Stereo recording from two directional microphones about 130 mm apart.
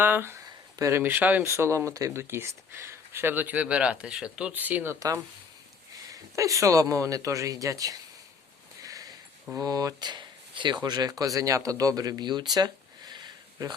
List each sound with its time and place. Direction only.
0.0 s a man's voice: 15° right (ahead or behind)
8.8 s a sound: 25° right (ahead or behind)
9.6 s speech: 30° right (ahead or behind)